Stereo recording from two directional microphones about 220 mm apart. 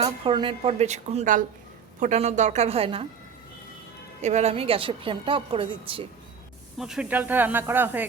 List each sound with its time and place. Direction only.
0.0 s a woman's voice: 20° right (ahead or behind)
4.2 s a woman's voice: 30° right (ahead or behind)
6.7 s speech: centre (ahead or behind)